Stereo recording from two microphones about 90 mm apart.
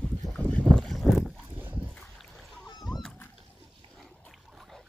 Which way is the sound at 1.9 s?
5° left (ahead or behind).